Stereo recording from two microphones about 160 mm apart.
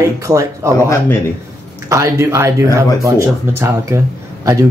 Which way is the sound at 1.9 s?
20° right (ahead or behind).